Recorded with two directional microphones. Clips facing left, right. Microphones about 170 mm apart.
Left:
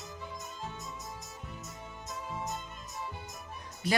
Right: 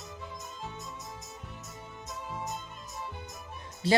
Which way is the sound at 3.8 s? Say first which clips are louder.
Right 5 dB; 30° right (ahead or behind).